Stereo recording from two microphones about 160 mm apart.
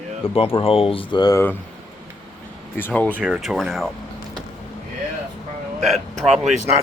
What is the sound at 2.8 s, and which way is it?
Speech, 10° left (ahead or behind).